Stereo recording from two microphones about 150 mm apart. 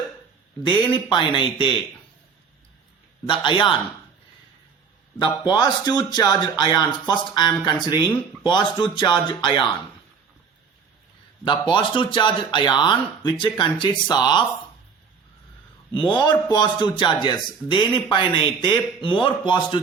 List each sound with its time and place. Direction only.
0.6 s a man's voice: 30° left (ahead or behind)
3.2 s a man's voice: 30° left (ahead or behind)
5.2 s a man's voice: 30° left (ahead or behind)
11.4 s a man's voice: 30° left (ahead or behind)
16.0 s a man's voice: 35° left (ahead or behind)